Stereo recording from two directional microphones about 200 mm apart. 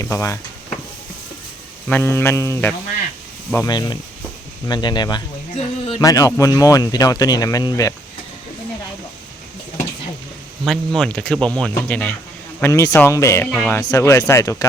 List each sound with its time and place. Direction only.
0.0 s speech: 15° left (ahead or behind)
1.9 s speech: 10° left (ahead or behind)
5.5 s a sound: 30° left (ahead or behind)
6.0 s speech: 15° left (ahead or behind)
10.7 s speech: centre (ahead or behind)